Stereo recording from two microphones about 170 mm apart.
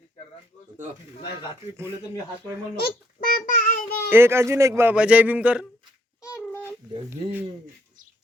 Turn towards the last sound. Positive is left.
turn(degrees=-10)  # may be behind; listen again after turning